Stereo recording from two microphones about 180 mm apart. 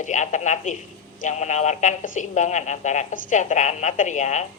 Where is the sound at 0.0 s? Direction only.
45° left (ahead or behind).